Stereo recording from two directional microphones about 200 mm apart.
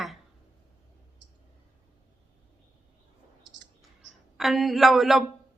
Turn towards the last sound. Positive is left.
turn(degrees=0)  # may be behind; listen again after turning